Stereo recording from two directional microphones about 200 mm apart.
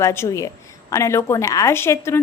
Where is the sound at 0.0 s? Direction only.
15° left (ahead or behind).